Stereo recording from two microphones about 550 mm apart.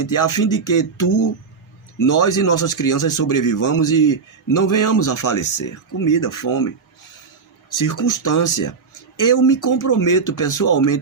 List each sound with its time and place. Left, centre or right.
0.0 s speech: left
7.8 s speech: left